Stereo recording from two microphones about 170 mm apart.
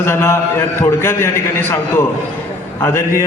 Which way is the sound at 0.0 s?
15° left (ahead or behind).